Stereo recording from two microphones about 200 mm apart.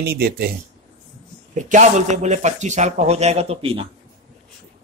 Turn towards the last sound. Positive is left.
turn(degrees=-30)  # may be behind; listen again after turning